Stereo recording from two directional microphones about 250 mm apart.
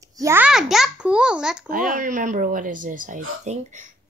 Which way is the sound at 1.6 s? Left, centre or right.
Right.